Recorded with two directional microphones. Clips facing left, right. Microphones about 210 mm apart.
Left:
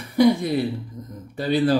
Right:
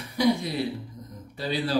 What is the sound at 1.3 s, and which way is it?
Speech, 50° left (ahead or behind).